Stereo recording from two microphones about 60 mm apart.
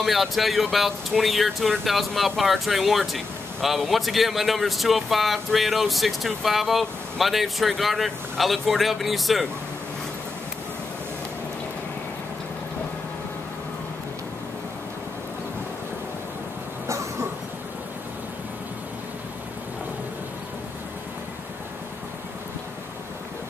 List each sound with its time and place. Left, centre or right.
0.0 s speech: centre
16.8 s cough: right